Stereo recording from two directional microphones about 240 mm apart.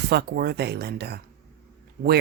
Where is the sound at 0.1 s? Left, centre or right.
Right.